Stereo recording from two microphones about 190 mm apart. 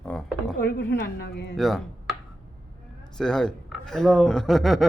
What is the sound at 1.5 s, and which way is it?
Speech, centre (ahead or behind).